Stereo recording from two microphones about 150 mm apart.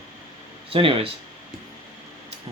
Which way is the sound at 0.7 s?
35° right (ahead or behind).